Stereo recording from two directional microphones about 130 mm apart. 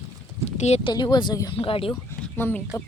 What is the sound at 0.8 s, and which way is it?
Speech, 35° left (ahead or behind).